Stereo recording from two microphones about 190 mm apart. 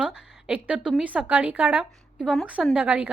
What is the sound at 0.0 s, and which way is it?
A woman's voice, 5° right (ahead or behind).